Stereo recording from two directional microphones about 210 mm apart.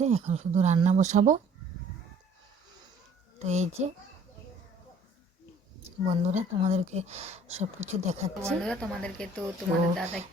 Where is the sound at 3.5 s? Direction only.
35° right (ahead or behind).